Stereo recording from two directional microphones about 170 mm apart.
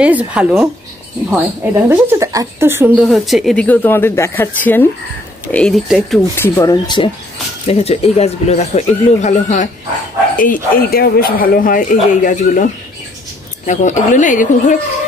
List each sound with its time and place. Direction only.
0.0 s a woman's voice: 5° right (ahead or behind)
3.0 s speech: centre (ahead or behind)
6.3 s speech: 15° left (ahead or behind)
7.6 s speech: 35° left (ahead or behind)
13.7 s a woman's voice: 45° left (ahead or behind)